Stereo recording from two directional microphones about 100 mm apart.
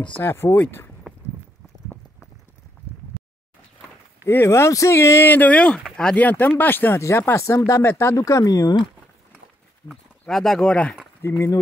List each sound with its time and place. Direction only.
0.1 s speech: 25° left (ahead or behind)
4.3 s speech: 25° left (ahead or behind)
9.8 s speech: 15° left (ahead or behind)
11.2 s speech: 30° left (ahead or behind)